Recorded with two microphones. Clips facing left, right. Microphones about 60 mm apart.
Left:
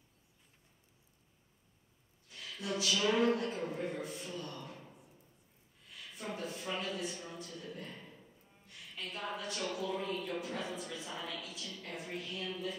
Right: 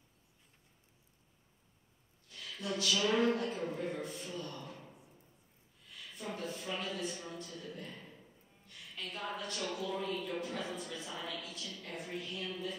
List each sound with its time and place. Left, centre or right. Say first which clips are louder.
2.3 s a woman's voice: even; centre
4.0 s a woman's voice: even; centre
6.1 s a woman's voice: even; centre
7.8 s a man's voice: even; centre